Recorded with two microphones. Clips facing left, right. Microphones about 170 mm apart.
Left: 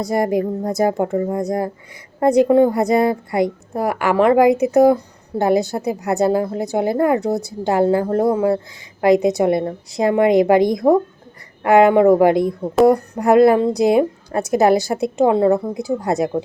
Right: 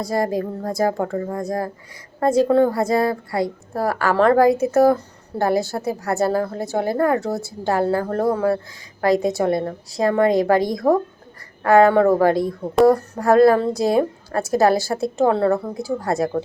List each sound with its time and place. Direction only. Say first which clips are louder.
0.0 s a woman's voice: left 3 dB; 20° left (ahead or behind)